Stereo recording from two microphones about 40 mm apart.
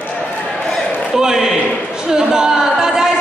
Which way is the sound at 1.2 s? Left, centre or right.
Centre.